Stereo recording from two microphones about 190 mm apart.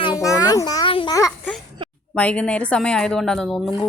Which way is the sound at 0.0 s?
20° left (ahead or behind).